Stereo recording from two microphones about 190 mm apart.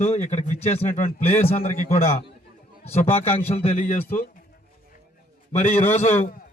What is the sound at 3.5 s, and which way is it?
Speech, 35° left (ahead or behind).